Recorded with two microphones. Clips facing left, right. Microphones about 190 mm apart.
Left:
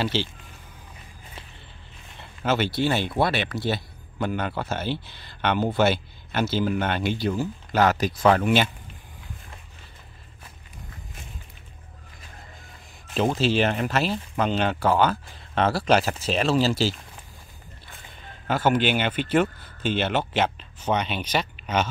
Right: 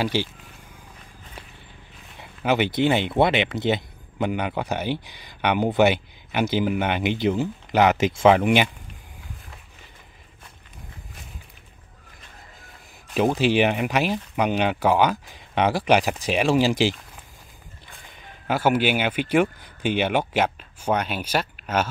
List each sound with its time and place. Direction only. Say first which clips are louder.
0.0 s speech: right 2 dB; 10° right (ahead or behind)
2.1 s speech: right 2 dB; 15° right (ahead or behind)
13.1 s speech: right 2 dB; 10° right (ahead or behind)
18.5 s speech: right 1 dB; 10° right (ahead or behind)